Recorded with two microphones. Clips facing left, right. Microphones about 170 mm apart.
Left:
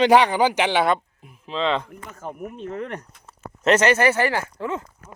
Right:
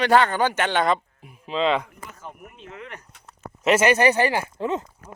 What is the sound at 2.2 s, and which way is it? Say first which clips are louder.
Speech: left 9 dB; 45° left (ahead or behind).